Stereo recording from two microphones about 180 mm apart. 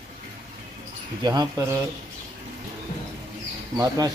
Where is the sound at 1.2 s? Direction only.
20° right (ahead or behind).